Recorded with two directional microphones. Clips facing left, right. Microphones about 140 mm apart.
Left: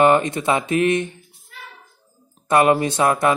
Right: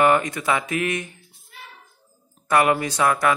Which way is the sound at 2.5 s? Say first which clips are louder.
Left 3 dB; 25° left (ahead or behind).